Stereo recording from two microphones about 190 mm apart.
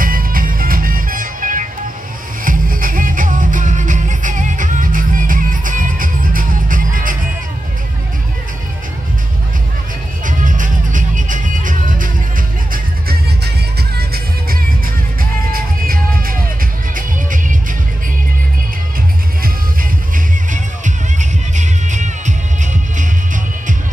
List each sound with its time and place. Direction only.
0.0 s music: 50° right (ahead or behind)
10.2 s music: 45° right (ahead or behind)
20.5 s music: 40° right (ahead or behind)